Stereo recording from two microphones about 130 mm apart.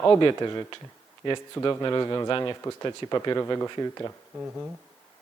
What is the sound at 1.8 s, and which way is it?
Speech, 30° left (ahead or behind).